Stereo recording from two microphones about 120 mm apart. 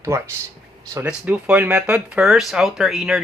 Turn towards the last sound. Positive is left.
turn(degrees=0)  # may be behind; listen again after turning